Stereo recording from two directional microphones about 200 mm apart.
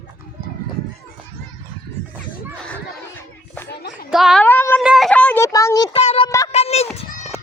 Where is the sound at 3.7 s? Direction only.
55° left (ahead or behind).